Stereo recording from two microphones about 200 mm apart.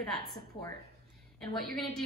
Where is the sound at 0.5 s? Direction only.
25° left (ahead or behind).